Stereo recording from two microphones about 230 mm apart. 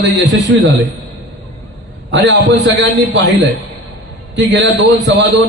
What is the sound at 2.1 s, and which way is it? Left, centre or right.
Speech, right.